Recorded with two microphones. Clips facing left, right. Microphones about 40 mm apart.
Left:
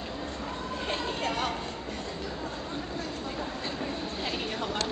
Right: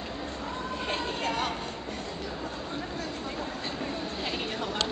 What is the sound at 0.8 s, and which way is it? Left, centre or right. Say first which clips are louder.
Vehicle: even; right.